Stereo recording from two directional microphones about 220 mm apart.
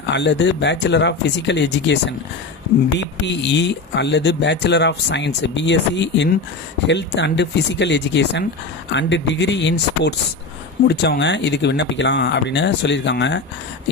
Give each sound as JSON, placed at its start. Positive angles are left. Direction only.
{"t": 0.1, "sound": "speech", "side_deg": 50}
{"t": 3.4, "sound": "speech", "side_deg": 55}